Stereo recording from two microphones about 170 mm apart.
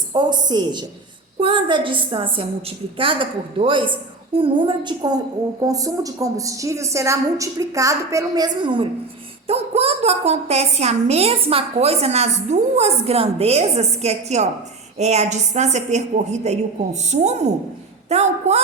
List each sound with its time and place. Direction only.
0.1 s a woman's voice: 25° right (ahead or behind)